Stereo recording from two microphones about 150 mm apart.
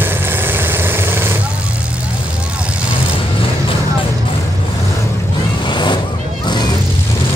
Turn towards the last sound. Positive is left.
turn(degrees=30)  # may be behind; listen again after turning